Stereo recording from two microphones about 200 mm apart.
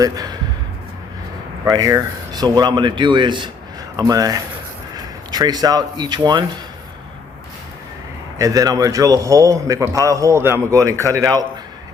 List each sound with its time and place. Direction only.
0.0 s speech: 20° right (ahead or behind)
1.6 s a man's voice: 20° right (ahead or behind)
8.4 s a man's voice: 15° right (ahead or behind)